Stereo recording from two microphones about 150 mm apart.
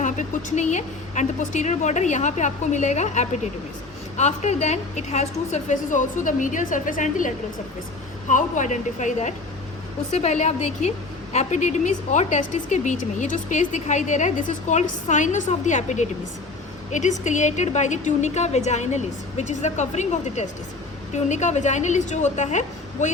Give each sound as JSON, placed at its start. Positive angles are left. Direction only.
{"t": 0.0, "sound": "a woman's voice", "side_deg": 55}